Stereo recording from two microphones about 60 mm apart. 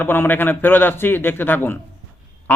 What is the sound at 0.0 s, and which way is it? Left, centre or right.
A man's voice, left.